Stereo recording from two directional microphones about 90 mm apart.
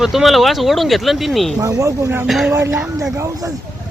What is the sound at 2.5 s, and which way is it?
Speech, 30° right (ahead or behind).